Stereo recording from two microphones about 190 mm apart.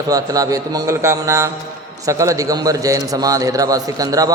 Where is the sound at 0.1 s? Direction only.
20° right (ahead or behind).